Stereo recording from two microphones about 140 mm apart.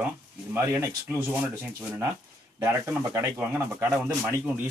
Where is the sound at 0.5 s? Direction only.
20° right (ahead or behind).